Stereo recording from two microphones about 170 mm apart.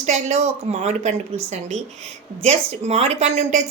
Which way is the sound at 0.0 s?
45° right (ahead or behind).